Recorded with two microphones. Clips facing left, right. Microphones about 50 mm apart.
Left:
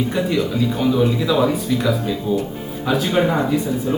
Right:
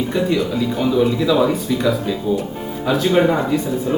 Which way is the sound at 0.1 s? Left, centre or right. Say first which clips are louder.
Right 1 dB; centre.